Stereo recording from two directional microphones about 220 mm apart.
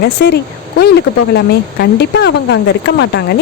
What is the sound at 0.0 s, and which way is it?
Speech, 50° left (ahead or behind).